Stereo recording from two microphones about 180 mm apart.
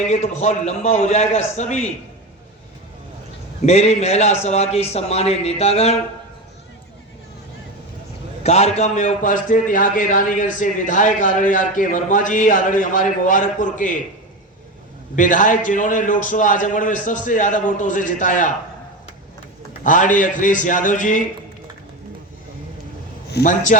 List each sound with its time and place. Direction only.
0.1 s a man's voice: 40° left (ahead or behind)
3.7 s a man's voice: 35° left (ahead or behind)
8.4 s a man's voice: 35° left (ahead or behind)
15.1 s a man's voice: 45° left (ahead or behind)
19.8 s a man's voice: 45° left (ahead or behind)
23.3 s a man's voice: 50° left (ahead or behind)